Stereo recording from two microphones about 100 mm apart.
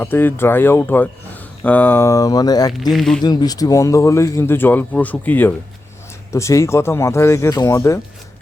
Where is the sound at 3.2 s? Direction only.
40° left (ahead or behind); by 5.5 s 20° left (ahead or behind).